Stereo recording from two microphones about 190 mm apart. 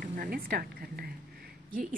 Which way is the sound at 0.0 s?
45° right (ahead or behind).